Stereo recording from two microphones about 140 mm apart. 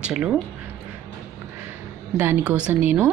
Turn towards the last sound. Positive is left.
turn(degrees=-10)  # may be behind; listen again after turning